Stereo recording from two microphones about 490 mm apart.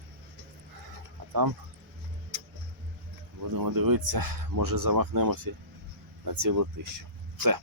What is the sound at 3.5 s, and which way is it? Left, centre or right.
Speech, right.